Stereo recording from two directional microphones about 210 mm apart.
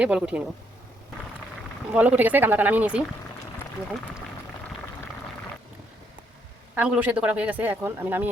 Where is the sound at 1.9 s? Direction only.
5° right (ahead or behind).